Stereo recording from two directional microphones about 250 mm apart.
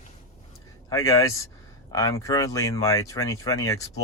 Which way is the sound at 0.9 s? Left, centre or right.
Centre.